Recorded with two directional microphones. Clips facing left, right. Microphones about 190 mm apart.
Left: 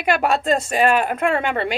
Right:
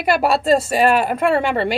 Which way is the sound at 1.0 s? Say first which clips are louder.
Right 3 dB; 5° right (ahead or behind).